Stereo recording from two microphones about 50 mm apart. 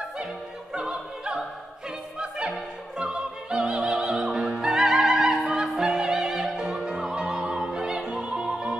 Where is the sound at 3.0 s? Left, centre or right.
Centre.